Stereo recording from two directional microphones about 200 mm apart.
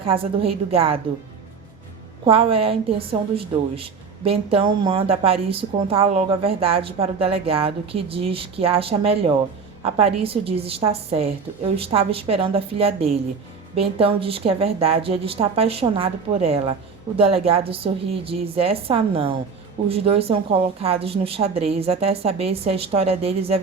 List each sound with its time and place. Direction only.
0.0 s a woman's voice: 25° right (ahead or behind)
2.2 s a woman's voice: 30° right (ahead or behind)